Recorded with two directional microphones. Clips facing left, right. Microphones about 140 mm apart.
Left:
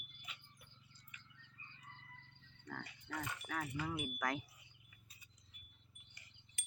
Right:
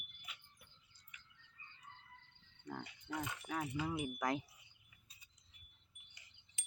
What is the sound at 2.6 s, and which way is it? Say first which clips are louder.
Speech: right 2 dB; 15° right (ahead or behind).